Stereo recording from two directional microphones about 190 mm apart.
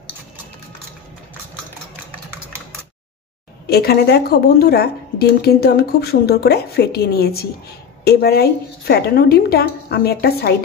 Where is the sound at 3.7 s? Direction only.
55° left (ahead or behind).